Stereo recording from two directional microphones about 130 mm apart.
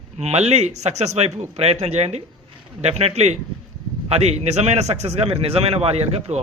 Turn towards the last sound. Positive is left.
turn(degrees=-55)  # may be behind; listen again after turning